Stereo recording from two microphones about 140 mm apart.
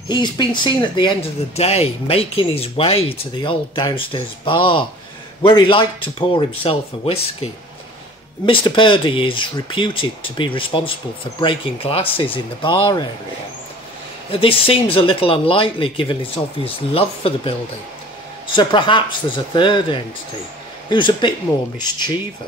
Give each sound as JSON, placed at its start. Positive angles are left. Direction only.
{"t": 0.1, "sound": "speech", "side_deg": 30}
{"t": 8.5, "sound": "speech", "side_deg": 35}
{"t": 14.3, "sound": "speech", "side_deg": 40}